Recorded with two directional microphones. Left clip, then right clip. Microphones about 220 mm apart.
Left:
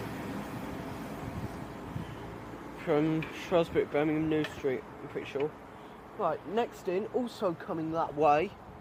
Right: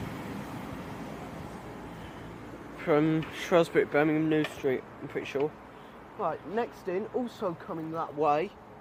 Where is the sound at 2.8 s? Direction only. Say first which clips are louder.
Right 3 dB; 15° right (ahead or behind).